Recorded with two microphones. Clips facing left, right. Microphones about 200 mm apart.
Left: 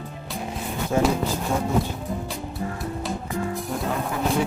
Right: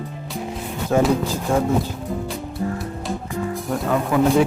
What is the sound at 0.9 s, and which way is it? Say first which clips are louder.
Speech: right 4 dB; 70° right (ahead or behind).